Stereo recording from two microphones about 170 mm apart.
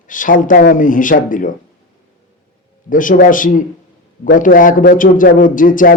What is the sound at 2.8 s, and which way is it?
Speech, 50° left (ahead or behind).